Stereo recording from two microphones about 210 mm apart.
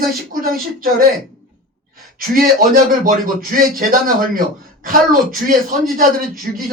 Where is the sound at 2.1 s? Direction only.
45° right (ahead or behind).